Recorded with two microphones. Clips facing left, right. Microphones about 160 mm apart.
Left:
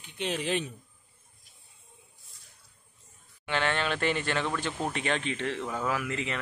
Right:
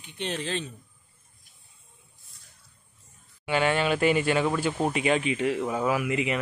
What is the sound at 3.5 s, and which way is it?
Speech, 10° right (ahead or behind).